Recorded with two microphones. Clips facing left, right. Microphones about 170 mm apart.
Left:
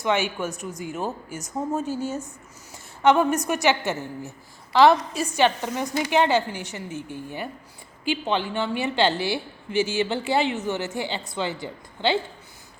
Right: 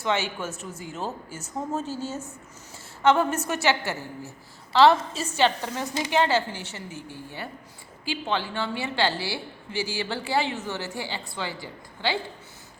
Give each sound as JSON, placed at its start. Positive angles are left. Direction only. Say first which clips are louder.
{"t": 0.0, "sound": "a woman's voice", "louder": "left 3 dB", "side_deg": 15}